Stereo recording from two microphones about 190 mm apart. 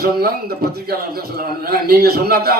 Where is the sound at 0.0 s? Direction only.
55° right (ahead or behind).